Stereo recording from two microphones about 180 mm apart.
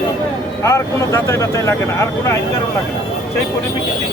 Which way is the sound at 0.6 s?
15° left (ahead or behind).